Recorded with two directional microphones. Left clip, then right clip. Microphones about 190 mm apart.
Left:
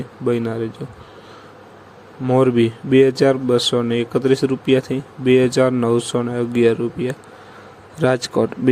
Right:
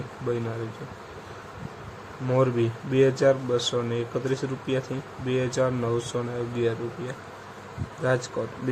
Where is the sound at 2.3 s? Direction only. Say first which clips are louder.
Left 8 dB; 35° left (ahead or behind).